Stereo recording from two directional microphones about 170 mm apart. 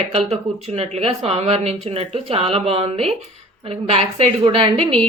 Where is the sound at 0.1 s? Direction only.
35° right (ahead or behind).